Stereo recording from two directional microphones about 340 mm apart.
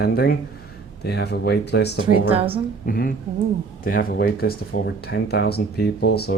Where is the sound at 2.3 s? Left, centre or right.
Centre.